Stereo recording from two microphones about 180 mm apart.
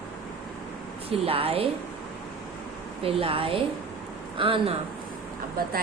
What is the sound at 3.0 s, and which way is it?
Speech, 30° right (ahead or behind).